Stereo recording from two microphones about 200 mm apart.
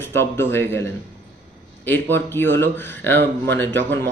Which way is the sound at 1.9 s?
10° left (ahead or behind).